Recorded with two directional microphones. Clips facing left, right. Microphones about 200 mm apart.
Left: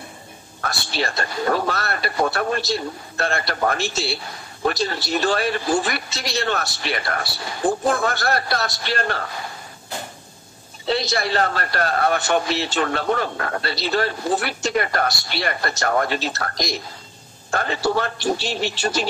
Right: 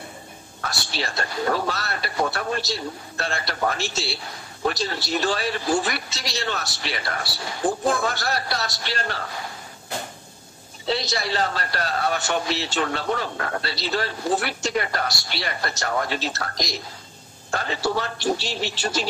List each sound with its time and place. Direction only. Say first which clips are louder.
0.7 s a man's voice: left 4 dB; 55° left (ahead or behind)
10.9 s a man's voice: left 3 dB; 55° left (ahead or behind)